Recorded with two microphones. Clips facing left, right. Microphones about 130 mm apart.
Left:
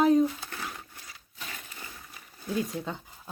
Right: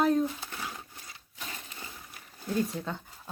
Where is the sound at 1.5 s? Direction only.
25° right (ahead or behind).